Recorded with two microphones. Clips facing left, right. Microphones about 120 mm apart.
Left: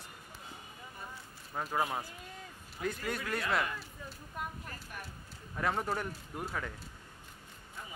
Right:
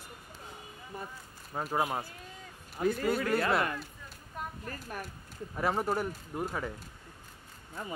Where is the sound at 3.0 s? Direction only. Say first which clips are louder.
Right 8 dB; 40° right (ahead or behind).